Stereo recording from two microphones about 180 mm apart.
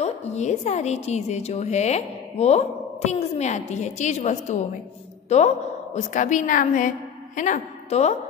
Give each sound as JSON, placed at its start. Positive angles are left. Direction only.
{"t": 0.0, "sound": "a woman's voice", "side_deg": 40}